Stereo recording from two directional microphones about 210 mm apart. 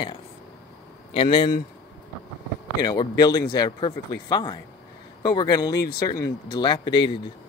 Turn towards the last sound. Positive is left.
turn(degrees=20)  # may be behind; listen again after turning